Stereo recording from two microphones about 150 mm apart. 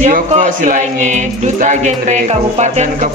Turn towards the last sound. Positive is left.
turn(degrees=-50)  # may be behind; listen again after turning